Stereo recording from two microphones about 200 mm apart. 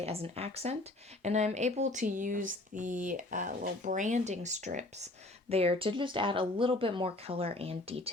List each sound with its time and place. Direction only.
0.0 s speech: 30° right (ahead or behind)